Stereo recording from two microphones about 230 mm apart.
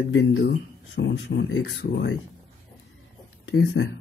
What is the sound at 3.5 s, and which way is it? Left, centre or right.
Speech, left.